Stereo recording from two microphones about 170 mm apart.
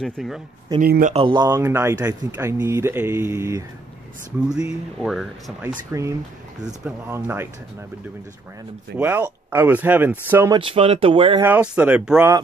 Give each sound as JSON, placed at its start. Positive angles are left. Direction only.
{"t": 0.0, "sound": "speech", "side_deg": 0}
{"t": 0.7, "sound": "speech", "side_deg": -55}
{"t": 1.1, "sound": "speech", "side_deg": -30}
{"t": 4.6, "sound": "speech", "side_deg": -5}
{"t": 8.9, "sound": "speech", "side_deg": -10}
{"t": 10.5, "sound": "speech", "side_deg": -30}
{"t": 11.4, "sound": "speech", "side_deg": -10}